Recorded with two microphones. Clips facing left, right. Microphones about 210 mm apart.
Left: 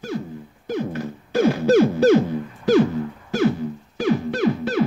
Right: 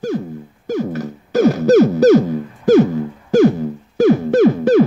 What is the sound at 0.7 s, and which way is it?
Music, 45° right (ahead or behind).